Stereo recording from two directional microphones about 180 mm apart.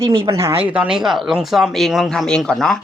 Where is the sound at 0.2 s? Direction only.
15° right (ahead or behind); by 2.8 s 5° left (ahead or behind).